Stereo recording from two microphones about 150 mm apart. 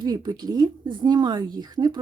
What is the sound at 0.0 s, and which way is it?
Speech, 30° right (ahead or behind).